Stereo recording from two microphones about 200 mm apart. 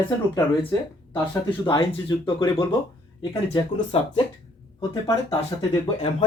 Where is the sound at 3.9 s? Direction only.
30° left (ahead or behind).